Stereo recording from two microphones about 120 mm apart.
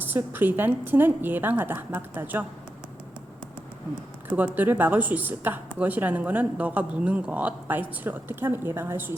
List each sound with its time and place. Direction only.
0.0 s speech: 15° right (ahead or behind)
4.3 s speech: 10° right (ahead or behind)